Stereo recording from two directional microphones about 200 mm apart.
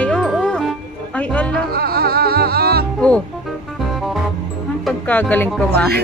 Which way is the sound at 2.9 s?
5° left (ahead or behind).